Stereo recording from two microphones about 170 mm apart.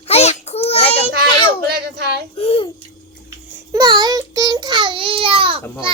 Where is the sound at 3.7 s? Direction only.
25° right (ahead or behind).